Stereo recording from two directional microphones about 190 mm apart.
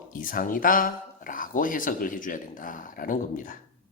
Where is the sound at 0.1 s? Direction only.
45° left (ahead or behind).